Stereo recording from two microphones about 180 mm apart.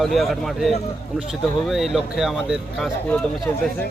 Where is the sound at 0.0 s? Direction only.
Centre (ahead or behind).